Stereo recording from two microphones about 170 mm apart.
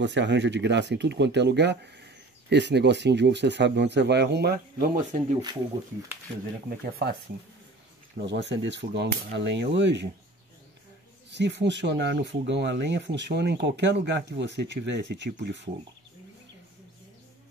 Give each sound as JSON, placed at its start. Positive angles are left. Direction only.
{"t": 0.0, "sound": "speech", "side_deg": -90}
{"t": 6.7, "sound": "speech", "side_deg": -65}
{"t": 8.3, "sound": "speech", "side_deg": -90}
{"t": 11.2, "sound": "speech", "side_deg": -90}